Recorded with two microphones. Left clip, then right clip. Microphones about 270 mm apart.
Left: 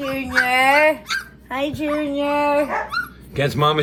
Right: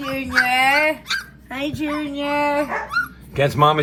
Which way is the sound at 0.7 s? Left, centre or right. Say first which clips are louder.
Left 2 dB; left.